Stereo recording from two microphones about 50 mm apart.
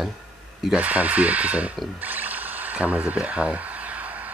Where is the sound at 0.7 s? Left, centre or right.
Right.